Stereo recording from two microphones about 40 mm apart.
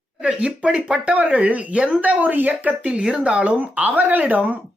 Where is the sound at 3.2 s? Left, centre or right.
Right.